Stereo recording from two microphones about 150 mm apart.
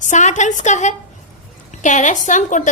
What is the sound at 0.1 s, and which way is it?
A woman's voice, 55° left (ahead or behind).